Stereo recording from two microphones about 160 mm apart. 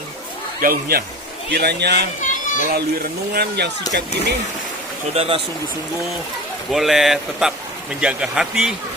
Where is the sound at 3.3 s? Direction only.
85° right.